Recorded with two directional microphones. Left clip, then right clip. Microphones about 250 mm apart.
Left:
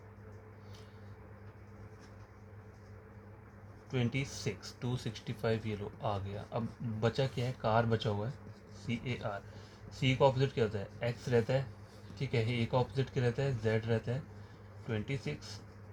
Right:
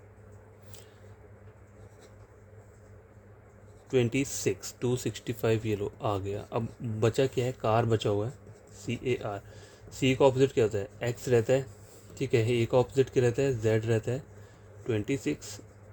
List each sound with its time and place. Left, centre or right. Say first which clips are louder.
3.8 s speech: right 10 dB; right